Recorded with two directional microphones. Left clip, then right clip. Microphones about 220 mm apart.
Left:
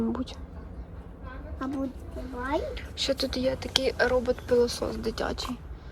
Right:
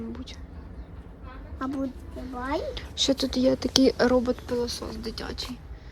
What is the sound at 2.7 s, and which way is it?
Speech, 20° right (ahead or behind).